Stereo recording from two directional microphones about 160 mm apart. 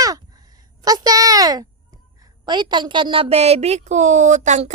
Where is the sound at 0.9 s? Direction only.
25° right (ahead or behind).